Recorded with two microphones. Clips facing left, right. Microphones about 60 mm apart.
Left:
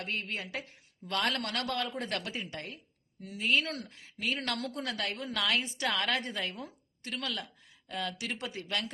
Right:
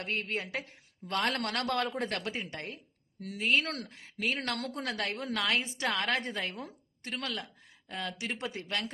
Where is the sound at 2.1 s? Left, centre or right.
Right.